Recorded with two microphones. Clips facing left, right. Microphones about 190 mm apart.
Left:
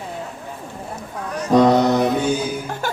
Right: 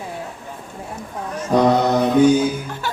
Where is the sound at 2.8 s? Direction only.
50° left (ahead or behind).